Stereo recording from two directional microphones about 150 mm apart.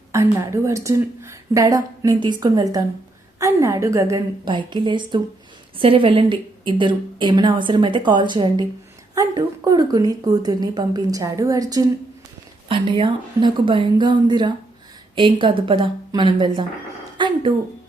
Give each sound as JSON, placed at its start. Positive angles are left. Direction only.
{"t": 0.1, "sound": "a woman's voice", "side_deg": -20}
{"t": 4.4, "sound": "a woman's voice", "side_deg": -30}
{"t": 17.2, "sound": "a sound", "side_deg": -30}